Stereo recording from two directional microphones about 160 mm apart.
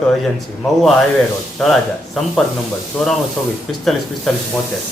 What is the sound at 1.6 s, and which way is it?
A man's voice, centre (ahead or behind).